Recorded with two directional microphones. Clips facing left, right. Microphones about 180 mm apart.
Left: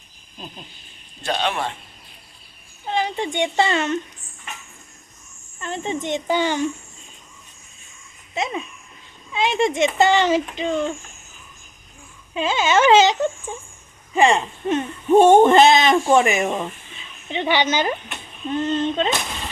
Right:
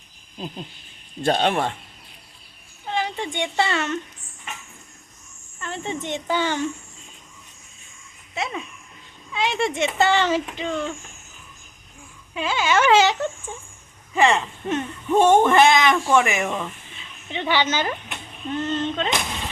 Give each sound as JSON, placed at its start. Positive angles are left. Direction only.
{"t": 1.2, "sound": "a man's voice", "side_deg": -45}
{"t": 2.8, "sound": "speech", "side_deg": 20}
{"t": 5.5, "sound": "speech", "side_deg": 20}
{"t": 8.4, "sound": "speech", "side_deg": 20}
{"t": 12.3, "sound": "speech", "side_deg": 20}